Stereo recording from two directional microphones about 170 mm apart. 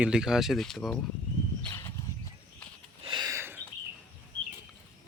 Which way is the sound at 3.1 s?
25° right (ahead or behind).